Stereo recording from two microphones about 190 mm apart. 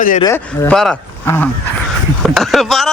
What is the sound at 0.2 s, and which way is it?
Speech, 15° left (ahead or behind).